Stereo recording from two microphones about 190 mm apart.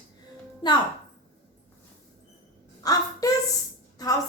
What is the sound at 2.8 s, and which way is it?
Speech, 20° left (ahead or behind).